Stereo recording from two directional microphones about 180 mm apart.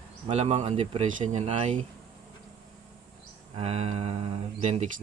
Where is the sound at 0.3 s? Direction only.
35° right (ahead or behind).